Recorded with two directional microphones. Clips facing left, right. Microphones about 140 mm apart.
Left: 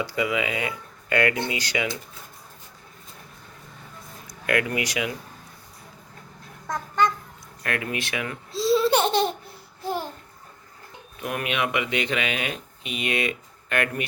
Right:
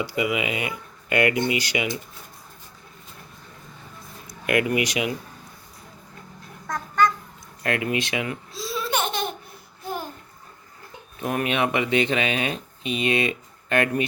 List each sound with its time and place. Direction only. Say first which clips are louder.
0.0 s speech: right 1 dB; 10° right (ahead or behind)
4.4 s speech: right 3 dB; 15° right (ahead or behind)
6.7 s babbling: right 1 dB; 25° left (ahead or behind)
7.6 s speech: right 4 dB; 20° right (ahead or behind)
8.5 s laughter: left 8 dB; 30° left (ahead or behind)
9.8 s a sound: left 3 dB; 30° left (ahead or behind)
11.2 s speech: right 3 dB; 30° right (ahead or behind)